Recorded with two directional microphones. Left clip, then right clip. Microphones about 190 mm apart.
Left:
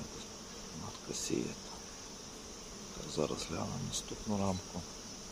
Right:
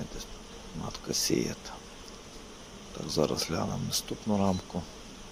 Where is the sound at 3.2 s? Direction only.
25° right (ahead or behind).